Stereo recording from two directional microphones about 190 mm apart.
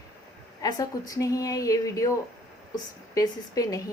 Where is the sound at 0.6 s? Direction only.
20° left (ahead or behind).